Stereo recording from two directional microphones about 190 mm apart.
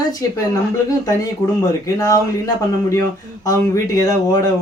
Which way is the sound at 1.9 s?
20° left (ahead or behind).